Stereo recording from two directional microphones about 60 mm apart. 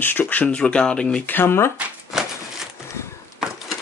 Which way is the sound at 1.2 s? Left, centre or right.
Left.